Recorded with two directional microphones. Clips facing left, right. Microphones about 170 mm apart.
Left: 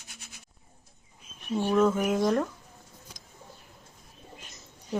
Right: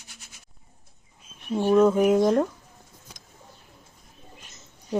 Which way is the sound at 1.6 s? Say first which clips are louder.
Right 6 dB; 15° right (ahead or behind).